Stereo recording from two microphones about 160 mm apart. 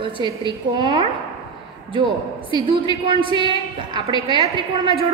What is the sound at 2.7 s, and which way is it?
A woman's voice, 35° right (ahead or behind).